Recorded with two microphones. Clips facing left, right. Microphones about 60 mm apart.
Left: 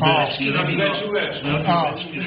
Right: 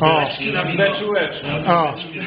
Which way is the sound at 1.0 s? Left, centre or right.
Right.